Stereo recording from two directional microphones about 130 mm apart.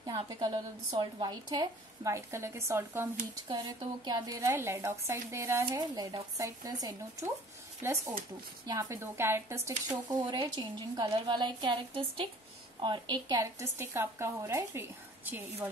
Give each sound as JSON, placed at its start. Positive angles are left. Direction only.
{"t": 0.0, "sound": "a woman's voice", "side_deg": -30}
{"t": 3.4, "sound": "a woman's voice", "side_deg": -35}
{"t": 13.6, "sound": "a woman's voice", "side_deg": -20}